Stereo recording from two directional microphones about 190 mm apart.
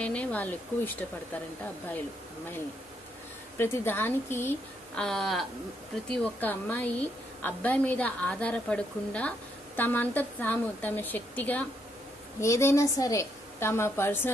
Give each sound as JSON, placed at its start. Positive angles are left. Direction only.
{"t": 0.0, "sound": "a woman's voice", "side_deg": 5}
{"t": 3.5, "sound": "a woman's voice", "side_deg": 10}